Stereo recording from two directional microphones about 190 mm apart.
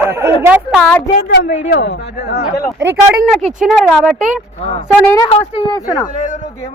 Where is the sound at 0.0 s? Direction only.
15° right (ahead or behind).